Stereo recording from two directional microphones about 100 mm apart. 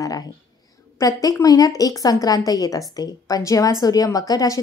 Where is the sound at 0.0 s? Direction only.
35° left (ahead or behind).